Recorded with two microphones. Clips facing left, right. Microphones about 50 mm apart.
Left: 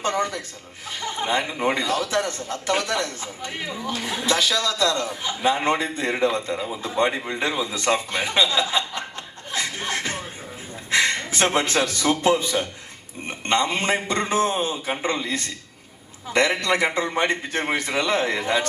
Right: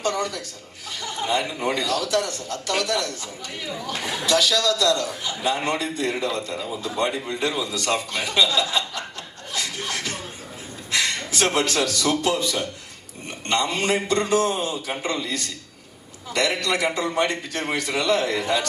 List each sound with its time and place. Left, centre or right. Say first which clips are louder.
0.0 s speech: left 1 dB; left
9.5 s music: left 2 dB; left
10.9 s a man's voice: left 3 dB; left